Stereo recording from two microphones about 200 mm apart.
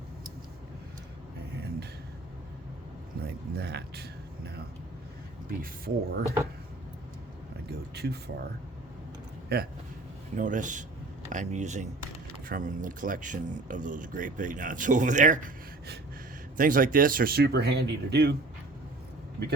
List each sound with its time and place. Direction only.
3.2 s a sound: 55° right (ahead or behind)
5.5 s speech: 50° right (ahead or behind)
7.7 s a sound: 55° right (ahead or behind)
9.5 s speech: 50° right (ahead or behind)
10.3 s speech: 40° right (ahead or behind)
16.6 s speech: 45° right (ahead or behind)